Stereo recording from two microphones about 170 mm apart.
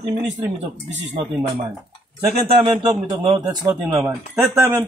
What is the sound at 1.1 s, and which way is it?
Speech, 35° right (ahead or behind).